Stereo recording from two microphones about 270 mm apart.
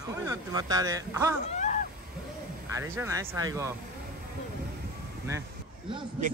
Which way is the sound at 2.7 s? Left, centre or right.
Centre.